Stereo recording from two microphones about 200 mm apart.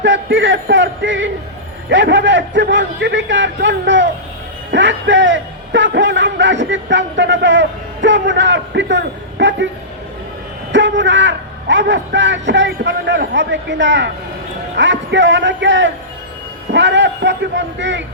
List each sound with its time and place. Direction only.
0.0 s a man's voice: 65° right (ahead or behind)
10.7 s a man's voice: 65° right (ahead or behind)